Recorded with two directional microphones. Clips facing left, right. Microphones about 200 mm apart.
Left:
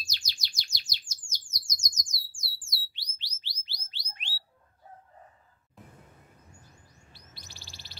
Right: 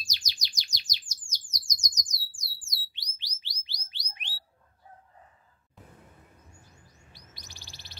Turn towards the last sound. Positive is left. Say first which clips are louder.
# even
turn(degrees=-20)  # may be behind; listen again after turning